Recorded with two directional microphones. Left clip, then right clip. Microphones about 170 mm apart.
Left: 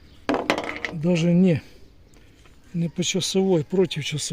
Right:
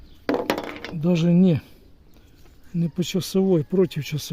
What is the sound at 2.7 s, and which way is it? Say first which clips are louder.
Speech: left 1 dB; 70° right (ahead or behind).